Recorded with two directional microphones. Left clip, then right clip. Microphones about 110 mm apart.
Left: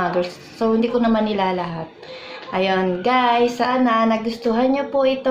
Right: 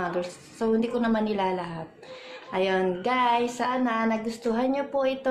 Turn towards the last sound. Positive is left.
turn(degrees=-10)  # may be behind; listen again after turning